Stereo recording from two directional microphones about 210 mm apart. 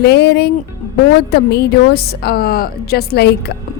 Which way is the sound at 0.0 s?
50° left (ahead or behind).